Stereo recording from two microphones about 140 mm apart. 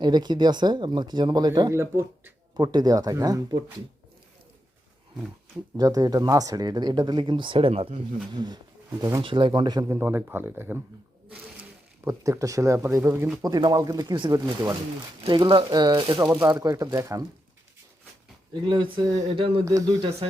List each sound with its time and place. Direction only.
0.0 s speech: 30° right (ahead or behind)
2.6 s speech: 30° right (ahead or behind)
5.7 s speech: 25° right (ahead or behind)
9.2 s speech: 35° right (ahead or behind)
9.9 s speech: 15° right (ahead or behind)
12.0 s speech: 20° right (ahead or behind)
18.6 s speech: 35° right (ahead or behind)
19.3 s speech: 40° right (ahead or behind)
19.6 s speech: 25° right (ahead or behind)